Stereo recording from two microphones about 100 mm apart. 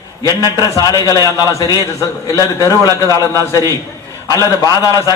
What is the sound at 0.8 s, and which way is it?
A man's voice, 40° left (ahead or behind).